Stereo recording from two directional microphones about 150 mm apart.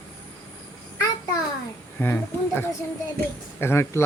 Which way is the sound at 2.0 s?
15° left (ahead or behind).